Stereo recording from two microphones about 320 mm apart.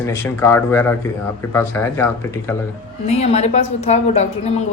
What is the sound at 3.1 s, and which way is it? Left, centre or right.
A woman's voice, centre.